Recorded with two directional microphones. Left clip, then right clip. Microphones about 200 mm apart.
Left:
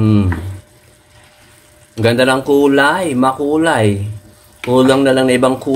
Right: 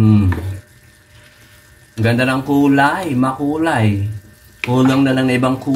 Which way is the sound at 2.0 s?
45° left (ahead or behind).